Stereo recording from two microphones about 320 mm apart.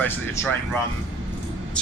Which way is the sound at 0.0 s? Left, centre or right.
Centre.